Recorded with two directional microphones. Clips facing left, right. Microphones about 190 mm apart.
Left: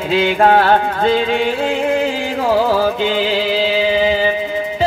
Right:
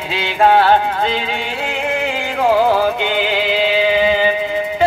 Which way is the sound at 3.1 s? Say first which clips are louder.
Left 1 dB; 35° left (ahead or behind).